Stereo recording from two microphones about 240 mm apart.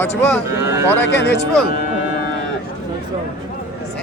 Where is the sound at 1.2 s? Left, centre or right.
Left.